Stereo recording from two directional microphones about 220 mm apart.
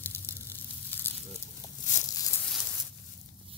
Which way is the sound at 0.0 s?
10° left (ahead or behind).